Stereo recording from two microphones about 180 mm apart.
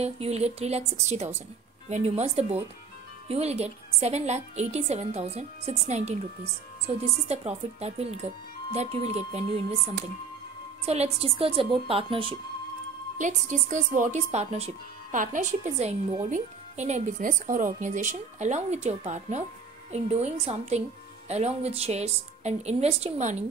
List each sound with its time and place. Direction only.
0.0 s speech: 35° right (ahead or behind)
7.2 s speech: 35° right (ahead or behind)
10.9 s speech: 35° right (ahead or behind)
13.2 s speech: 45° right (ahead or behind)